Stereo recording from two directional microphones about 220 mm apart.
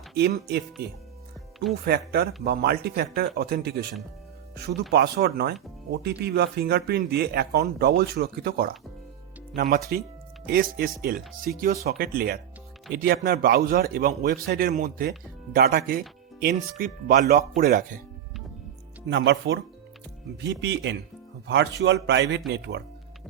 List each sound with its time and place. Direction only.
0.2 s speech: 50° right (ahead or behind)
4.9 s speech: 45° right (ahead or behind)
19.0 s speech: 55° right (ahead or behind)